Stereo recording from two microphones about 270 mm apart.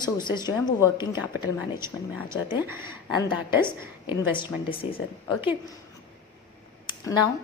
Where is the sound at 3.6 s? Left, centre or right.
Centre.